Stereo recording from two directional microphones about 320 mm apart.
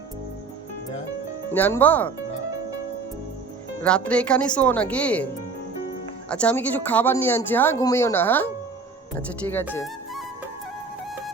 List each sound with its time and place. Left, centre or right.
1.5 s speech: centre
3.8 s speech: centre
6.3 s speech: centre
9.7 s music: centre